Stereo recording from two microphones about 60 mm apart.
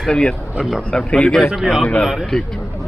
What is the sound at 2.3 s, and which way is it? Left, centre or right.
Speech, centre.